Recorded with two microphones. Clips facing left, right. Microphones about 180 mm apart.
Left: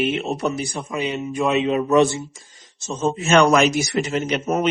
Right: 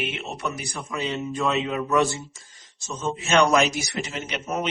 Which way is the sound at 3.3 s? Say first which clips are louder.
Left 4 dB; 60° left (ahead or behind).